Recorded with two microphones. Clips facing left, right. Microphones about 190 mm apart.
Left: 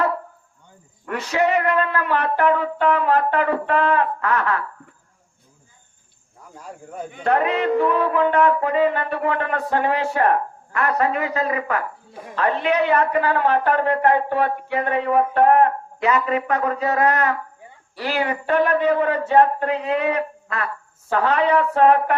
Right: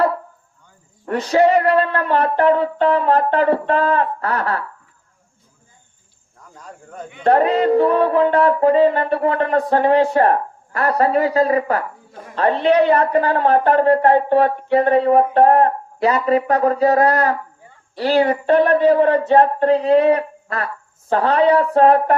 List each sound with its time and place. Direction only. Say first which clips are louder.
1.0 s speech: right 6 dB; 35° right (ahead or behind)
6.5 s speech: left 2 dB; 10° left (ahead or behind)
7.3 s speech: right 5 dB; 35° right (ahead or behind)
19.3 s a sound: right 4 dB; 35° right (ahead or behind)
21.1 s speech: right 4 dB; 35° right (ahead or behind)